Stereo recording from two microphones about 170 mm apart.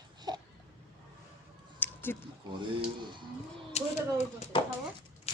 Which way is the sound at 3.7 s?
40° left (ahead or behind).